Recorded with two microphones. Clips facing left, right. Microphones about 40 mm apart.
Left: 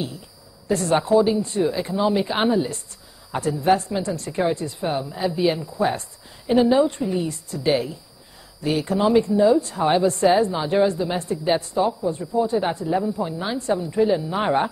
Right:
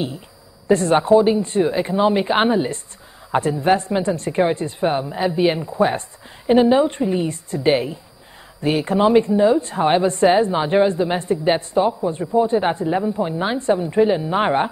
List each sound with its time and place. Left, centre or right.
0.7 s a woman's voice: right